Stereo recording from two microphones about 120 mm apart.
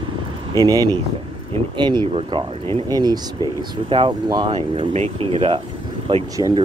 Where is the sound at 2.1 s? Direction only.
50° right (ahead or behind).